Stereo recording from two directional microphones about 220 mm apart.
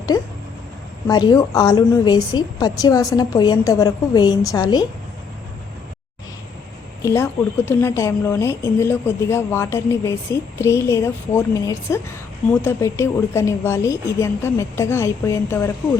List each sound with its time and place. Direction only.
0.1 s speech: 15° left (ahead or behind)
7.0 s speech: 10° left (ahead or behind)